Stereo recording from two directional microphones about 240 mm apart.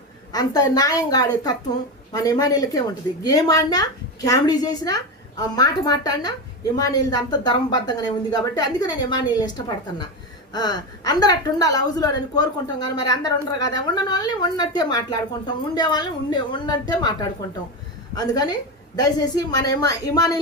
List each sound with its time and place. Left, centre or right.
0.3 s a woman's voice: centre
10.5 s a woman's voice: centre